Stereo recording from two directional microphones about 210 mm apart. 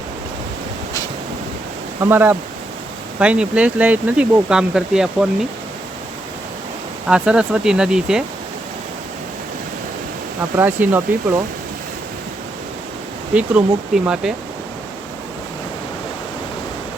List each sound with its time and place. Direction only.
2.0 s speech: 10° right (ahead or behind)
7.1 s speech: 5° right (ahead or behind)
10.6 s speech: 10° right (ahead or behind)
13.3 s speech: 5° right (ahead or behind)